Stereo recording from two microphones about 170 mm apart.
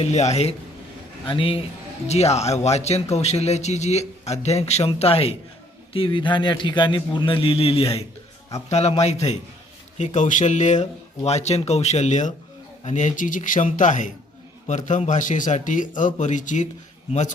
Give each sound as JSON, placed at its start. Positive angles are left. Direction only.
{"t": 0.0, "sound": "a man's voice", "side_deg": 40}